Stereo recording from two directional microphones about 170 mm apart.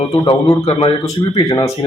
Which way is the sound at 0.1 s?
25° left (ahead or behind).